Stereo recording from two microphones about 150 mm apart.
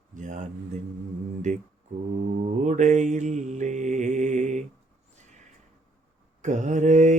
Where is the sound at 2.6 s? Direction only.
55° right (ahead or behind).